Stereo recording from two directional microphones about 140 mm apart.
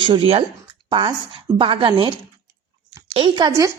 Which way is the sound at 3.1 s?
35° right (ahead or behind).